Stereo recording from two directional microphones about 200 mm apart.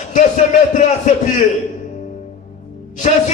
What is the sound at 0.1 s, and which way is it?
A man's voice, 40° left (ahead or behind).